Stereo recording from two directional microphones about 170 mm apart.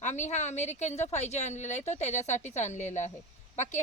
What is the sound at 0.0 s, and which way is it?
Speech, 45° left (ahead or behind).